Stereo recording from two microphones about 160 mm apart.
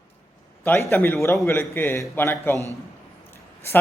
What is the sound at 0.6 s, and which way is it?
A man's voice, 15° left (ahead or behind).